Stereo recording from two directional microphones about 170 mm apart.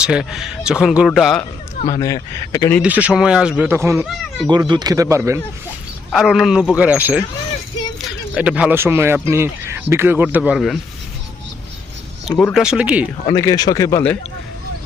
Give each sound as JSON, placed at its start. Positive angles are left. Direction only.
{"t": 0.0, "sound": "speech", "side_deg": -5}
{"t": 1.9, "sound": "speech", "side_deg": 20}
{"t": 2.8, "sound": "speech", "side_deg": -10}
{"t": 3.7, "sound": "speech", "side_deg": -15}
{"t": 4.4, "sound": "speech", "side_deg": -25}
{"t": 6.1, "sound": "speech", "side_deg": 0}
{"t": 8.4, "sound": "speech", "side_deg": -5}
{"t": 12.4, "sound": "speech", "side_deg": 5}
{"t": 12.6, "sound": "speech", "side_deg": -5}
{"t": 13.3, "sound": "speech", "side_deg": 20}